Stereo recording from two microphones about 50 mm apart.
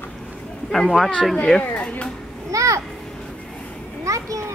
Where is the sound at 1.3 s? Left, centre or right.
Centre.